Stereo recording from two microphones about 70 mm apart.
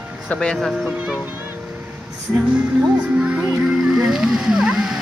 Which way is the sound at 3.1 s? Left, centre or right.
Centre.